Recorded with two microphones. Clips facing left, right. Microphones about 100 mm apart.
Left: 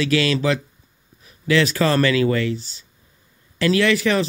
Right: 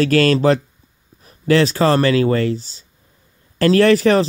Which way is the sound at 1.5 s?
30° right (ahead or behind).